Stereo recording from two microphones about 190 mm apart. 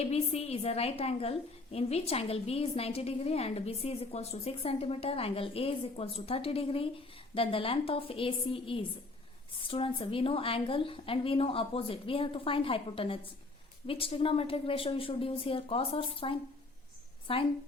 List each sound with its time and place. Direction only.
0.0 s a woman's voice: 30° left (ahead or behind)